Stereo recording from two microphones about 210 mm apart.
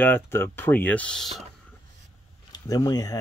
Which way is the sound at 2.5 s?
15° left (ahead or behind).